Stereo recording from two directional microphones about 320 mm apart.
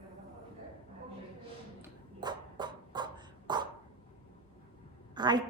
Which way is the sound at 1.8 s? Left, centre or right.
Centre.